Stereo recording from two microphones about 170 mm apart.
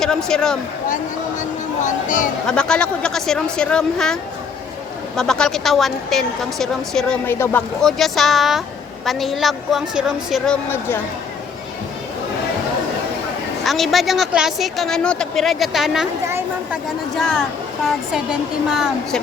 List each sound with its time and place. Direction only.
0.0 s a woman's voice: 5° left (ahead or behind)
1.8 s speech: 50° left (ahead or behind)
2.5 s a woman's voice: 5° left (ahead or behind)
7.3 s speech: 15° left (ahead or behind)
7.8 s a woman's voice: centre (ahead or behind)
13.7 s a woman's voice: centre (ahead or behind)
16.2 s a woman's voice: 15° right (ahead or behind)
17.2 s a woman's voice: 5° left (ahead or behind)